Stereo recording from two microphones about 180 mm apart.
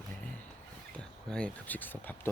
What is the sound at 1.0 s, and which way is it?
Speech, 5° left (ahead or behind).